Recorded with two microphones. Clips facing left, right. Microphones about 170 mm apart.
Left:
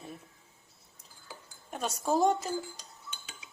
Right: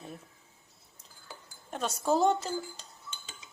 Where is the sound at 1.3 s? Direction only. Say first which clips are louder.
Right 1 dB; 10° left (ahead or behind).